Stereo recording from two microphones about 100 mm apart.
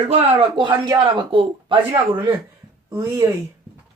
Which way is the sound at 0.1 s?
90° right.